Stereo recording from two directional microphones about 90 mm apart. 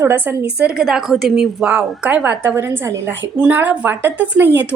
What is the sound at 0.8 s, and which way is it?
A woman's voice, centre (ahead or behind).